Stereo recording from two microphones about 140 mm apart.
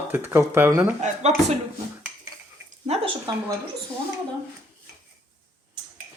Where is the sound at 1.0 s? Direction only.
55° right (ahead or behind).